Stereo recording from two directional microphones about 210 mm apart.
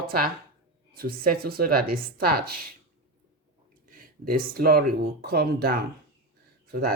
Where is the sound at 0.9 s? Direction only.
45° right (ahead or behind).